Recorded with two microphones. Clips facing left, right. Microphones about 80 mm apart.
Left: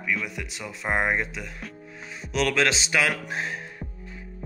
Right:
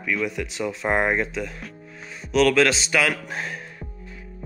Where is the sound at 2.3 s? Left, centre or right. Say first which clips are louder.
Right 6 dB; left.